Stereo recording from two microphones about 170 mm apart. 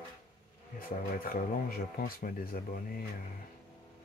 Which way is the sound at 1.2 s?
60° left (ahead or behind).